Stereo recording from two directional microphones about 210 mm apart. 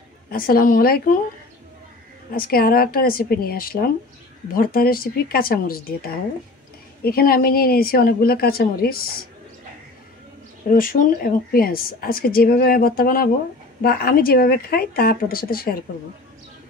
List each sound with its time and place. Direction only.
0.3 s a woman's voice: 45° left (ahead or behind)
2.3 s a woman's voice: 45° left (ahead or behind)
10.7 s a woman's voice: 40° left (ahead or behind)